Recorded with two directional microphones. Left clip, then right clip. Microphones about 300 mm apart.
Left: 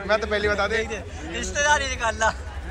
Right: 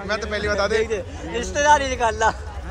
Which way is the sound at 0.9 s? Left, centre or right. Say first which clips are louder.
Right 5 dB; right.